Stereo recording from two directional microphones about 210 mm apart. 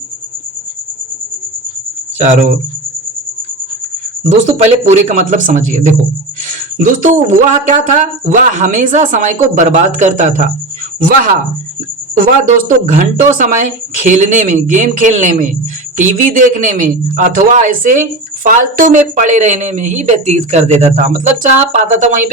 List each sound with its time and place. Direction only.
2.1 s speech: 35° right (ahead or behind)
4.2 s a man's voice: 35° right (ahead or behind)
12.2 s a man's voice: 40° right (ahead or behind)